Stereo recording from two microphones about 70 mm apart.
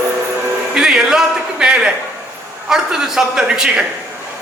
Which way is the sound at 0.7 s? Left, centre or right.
Centre.